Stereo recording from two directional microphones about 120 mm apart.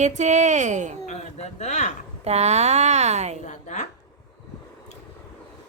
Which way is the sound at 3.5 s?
80° left.